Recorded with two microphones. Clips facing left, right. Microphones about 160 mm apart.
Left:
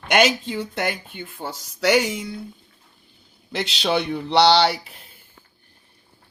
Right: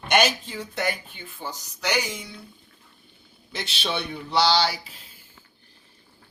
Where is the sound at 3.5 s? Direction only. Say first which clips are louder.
Left 7 dB; 85° left; by 5.1 s 60° left (ahead or behind).